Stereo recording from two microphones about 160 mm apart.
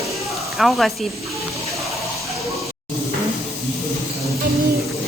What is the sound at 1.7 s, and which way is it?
Music, centre (ahead or behind).